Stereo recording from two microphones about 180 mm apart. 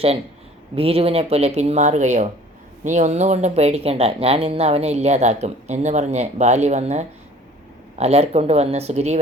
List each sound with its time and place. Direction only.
0.8 s speech: 35° right (ahead or behind)